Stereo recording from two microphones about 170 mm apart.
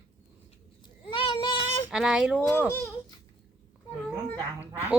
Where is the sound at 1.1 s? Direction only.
30° left (ahead or behind).